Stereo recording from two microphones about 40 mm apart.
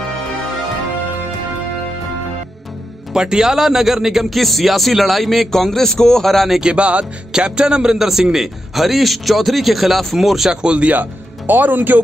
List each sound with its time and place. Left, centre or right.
3.1 s a man's voice: centre
6.6 s speech: right
7.3 s a man's voice: centre
10.5 s speech: right
10.9 s speech: right